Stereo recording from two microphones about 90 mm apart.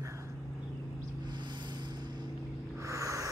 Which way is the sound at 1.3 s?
55° right (ahead or behind).